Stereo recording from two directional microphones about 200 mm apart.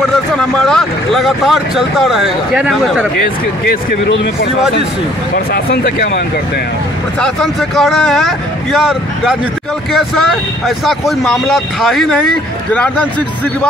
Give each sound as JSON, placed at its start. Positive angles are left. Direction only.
{"t": 0.4, "sound": "speech", "side_deg": 5}
{"t": 5.3, "sound": "speech", "side_deg": 50}
{"t": 7.2, "sound": "speech", "side_deg": 0}